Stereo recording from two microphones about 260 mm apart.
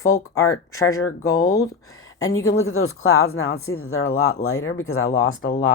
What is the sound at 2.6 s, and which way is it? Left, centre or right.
Speech, left.